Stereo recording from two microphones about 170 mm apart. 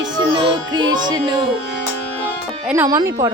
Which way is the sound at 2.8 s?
20° right (ahead or behind).